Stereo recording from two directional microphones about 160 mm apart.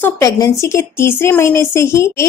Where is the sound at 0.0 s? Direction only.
20° left (ahead or behind).